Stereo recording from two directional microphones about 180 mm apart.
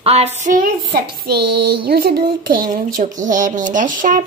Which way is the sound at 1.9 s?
60° right (ahead or behind).